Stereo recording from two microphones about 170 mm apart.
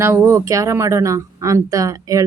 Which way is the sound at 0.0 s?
15° right (ahead or behind).